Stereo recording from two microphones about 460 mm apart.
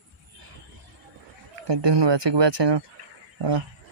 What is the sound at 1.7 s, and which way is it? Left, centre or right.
Speech, right.